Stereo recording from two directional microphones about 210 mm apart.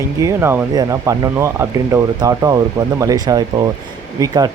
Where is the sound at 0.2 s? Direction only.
15° right (ahead or behind).